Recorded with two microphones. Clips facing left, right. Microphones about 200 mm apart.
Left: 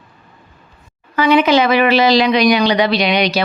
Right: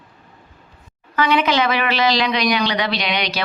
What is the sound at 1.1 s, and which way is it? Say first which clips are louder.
Speech: left 6 dB; 10° left (ahead or behind).